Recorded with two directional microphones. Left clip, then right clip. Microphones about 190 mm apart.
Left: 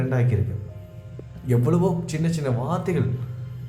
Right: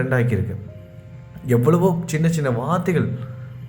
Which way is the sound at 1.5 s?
20° right (ahead or behind).